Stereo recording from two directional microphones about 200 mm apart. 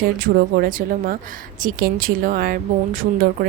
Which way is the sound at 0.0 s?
50° right (ahead or behind).